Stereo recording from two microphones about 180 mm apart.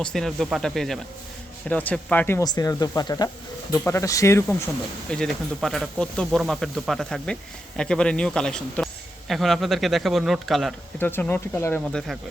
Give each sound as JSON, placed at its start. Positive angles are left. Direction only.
{"t": 0.0, "sound": "speech", "side_deg": 0}
{"t": 5.1, "sound": "speech", "side_deg": 0}
{"t": 10.9, "sound": "speech", "side_deg": 10}